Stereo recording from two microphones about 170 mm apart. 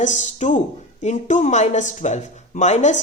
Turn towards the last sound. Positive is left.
turn(degrees=45)  # may be behind; listen again after turning